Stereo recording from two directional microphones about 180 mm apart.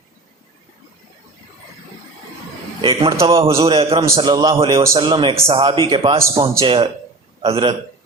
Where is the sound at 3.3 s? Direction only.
30° right (ahead or behind).